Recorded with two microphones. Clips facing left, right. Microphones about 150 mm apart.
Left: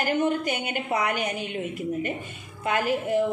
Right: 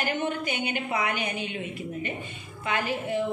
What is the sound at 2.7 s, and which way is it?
Speech, 45° left (ahead or behind).